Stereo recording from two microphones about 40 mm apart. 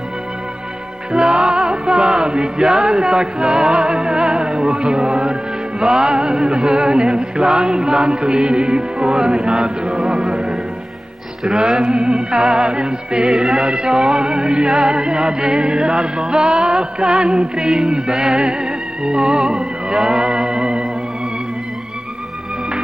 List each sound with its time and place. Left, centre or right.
1.1 s music: right
11.4 s music: centre